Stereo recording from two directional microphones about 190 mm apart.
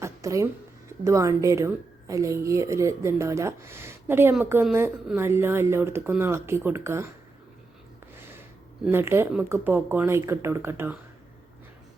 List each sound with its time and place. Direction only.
0.0 s a sound: 15° right (ahead or behind)
1.0 s speech: 15° right (ahead or behind)
8.1 s speech: 10° right (ahead or behind)